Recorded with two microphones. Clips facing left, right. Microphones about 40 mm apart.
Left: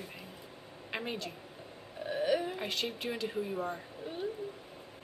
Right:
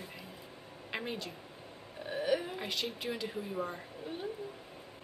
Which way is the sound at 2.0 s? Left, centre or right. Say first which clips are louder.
Left 3 dB; centre.